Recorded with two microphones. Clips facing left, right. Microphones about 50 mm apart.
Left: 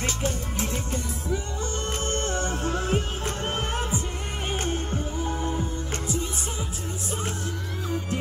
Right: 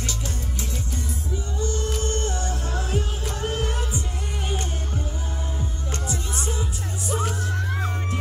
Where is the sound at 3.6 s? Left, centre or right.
Centre.